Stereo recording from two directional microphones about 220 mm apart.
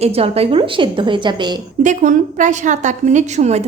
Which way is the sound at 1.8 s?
35° right (ahead or behind).